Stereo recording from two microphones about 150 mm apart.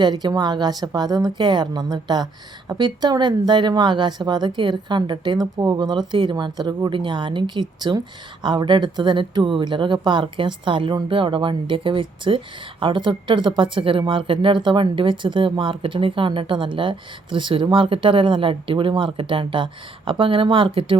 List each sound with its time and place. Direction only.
0.0 s a woman's voice: 30° right (ahead or behind)